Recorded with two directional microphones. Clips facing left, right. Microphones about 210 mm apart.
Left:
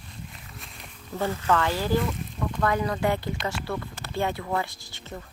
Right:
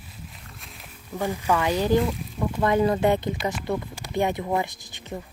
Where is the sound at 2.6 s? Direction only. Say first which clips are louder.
Right 5 dB; 25° right (ahead or behind).